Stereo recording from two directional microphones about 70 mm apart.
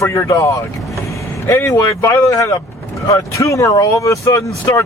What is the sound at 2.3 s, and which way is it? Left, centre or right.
Speech, left.